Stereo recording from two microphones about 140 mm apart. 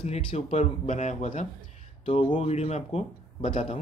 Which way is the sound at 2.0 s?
45° left (ahead or behind).